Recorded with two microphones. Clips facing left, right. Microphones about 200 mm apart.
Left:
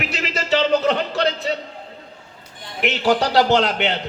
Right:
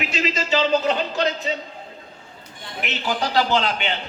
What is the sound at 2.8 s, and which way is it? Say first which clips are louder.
A man's voice: left 7 dB; 75° left (ahead or behind).